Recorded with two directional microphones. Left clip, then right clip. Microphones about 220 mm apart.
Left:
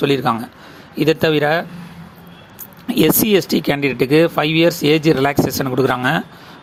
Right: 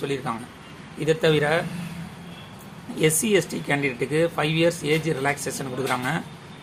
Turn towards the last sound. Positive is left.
turn(degrees=40)  # may be behind; listen again after turning